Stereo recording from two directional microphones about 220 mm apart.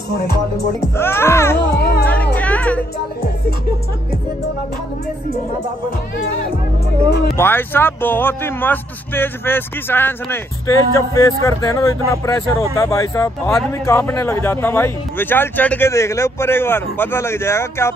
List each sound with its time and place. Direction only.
0.9 s speech: 10° left (ahead or behind)
1.6 s music: 45° left (ahead or behind)
2.3 s music: 5° left (ahead or behind)
7.3 s speech: 10° left (ahead or behind)